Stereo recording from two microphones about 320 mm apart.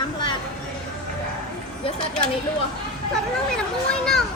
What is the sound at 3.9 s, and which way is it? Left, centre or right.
Speech, centre.